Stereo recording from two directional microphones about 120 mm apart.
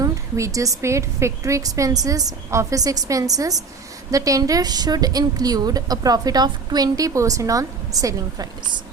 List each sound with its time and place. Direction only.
0.0 s a woman's voice: 25° right (ahead or behind)